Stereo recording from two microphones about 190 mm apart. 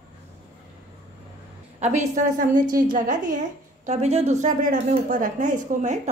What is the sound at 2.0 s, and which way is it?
A woman's voice, 45° right (ahead or behind).